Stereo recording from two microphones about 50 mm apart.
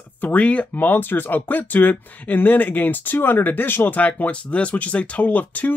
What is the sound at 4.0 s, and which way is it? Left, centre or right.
Speech, left.